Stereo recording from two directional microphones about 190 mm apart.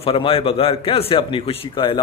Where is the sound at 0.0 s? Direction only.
30° left (ahead or behind).